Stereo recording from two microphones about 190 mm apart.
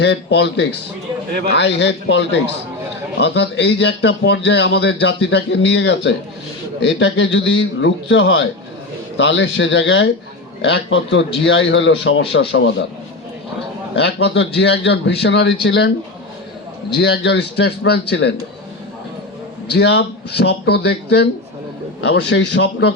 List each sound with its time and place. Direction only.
0.0 s a man's voice: 65° left (ahead or behind); by 12.7 s 85° left
13.9 s a man's voice: 65° left (ahead or behind)
17.0 s a man's voice: 65° left (ahead or behind)
19.7 s a man's voice: 65° left (ahead or behind)